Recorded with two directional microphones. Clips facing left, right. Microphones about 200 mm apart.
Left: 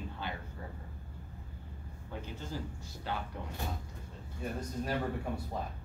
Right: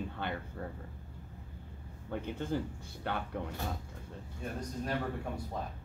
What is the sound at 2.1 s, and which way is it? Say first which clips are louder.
Speech: right 7 dB; 55° right (ahead or behind).